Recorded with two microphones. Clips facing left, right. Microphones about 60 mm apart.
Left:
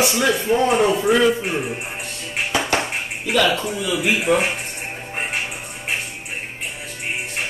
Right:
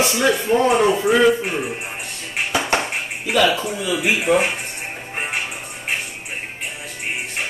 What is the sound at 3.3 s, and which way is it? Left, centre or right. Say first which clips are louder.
Speech: right 1 dB; centre.